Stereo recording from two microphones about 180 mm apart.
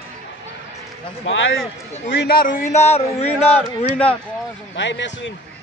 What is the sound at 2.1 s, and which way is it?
Speech, 60° left (ahead or behind).